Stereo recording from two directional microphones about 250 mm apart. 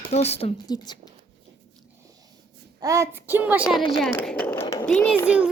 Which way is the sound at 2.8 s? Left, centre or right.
Centre.